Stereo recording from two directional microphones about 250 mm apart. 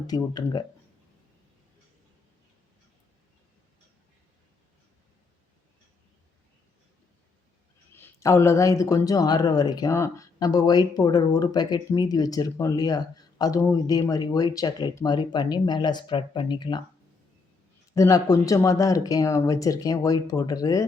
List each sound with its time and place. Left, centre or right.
0.1 s speech: centre
7.9 s speech: centre
17.9 s speech: centre